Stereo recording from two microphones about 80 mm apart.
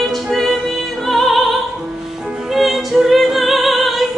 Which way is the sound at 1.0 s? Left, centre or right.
Centre.